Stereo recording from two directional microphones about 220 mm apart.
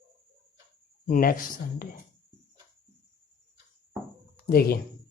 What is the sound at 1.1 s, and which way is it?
Speech, 40° left (ahead or behind).